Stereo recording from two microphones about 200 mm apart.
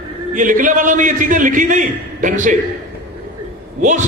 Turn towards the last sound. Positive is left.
turn(degrees=-40)  # may be behind; listen again after turning